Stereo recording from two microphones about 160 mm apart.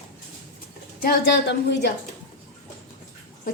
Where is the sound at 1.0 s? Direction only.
90° left.